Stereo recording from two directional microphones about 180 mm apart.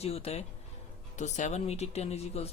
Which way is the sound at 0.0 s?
35° left (ahead or behind).